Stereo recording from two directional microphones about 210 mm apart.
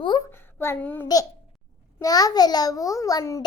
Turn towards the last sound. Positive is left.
turn(degrees=15)  # may be behind; listen again after turning